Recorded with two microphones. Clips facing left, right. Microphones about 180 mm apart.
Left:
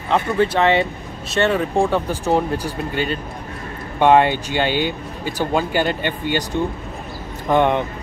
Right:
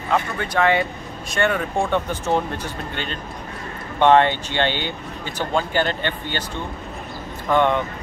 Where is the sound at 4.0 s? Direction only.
10° left (ahead or behind).